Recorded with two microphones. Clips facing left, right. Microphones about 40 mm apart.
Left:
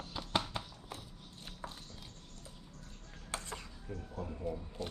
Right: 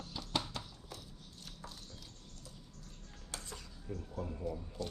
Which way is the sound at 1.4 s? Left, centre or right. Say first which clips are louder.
Left 4 dB; left.